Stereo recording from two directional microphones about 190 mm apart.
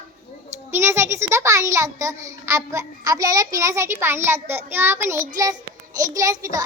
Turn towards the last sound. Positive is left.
turn(degrees=-15)  # may be behind; listen again after turning